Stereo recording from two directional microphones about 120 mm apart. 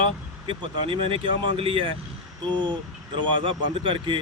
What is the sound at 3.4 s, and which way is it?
Speech, 45° right (ahead or behind).